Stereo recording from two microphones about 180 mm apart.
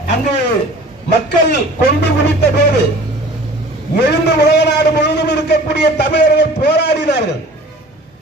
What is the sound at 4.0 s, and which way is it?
A man's voice, 70° left (ahead or behind).